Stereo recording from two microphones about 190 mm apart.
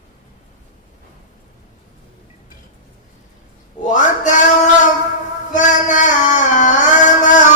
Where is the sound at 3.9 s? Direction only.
40° left (ahead or behind).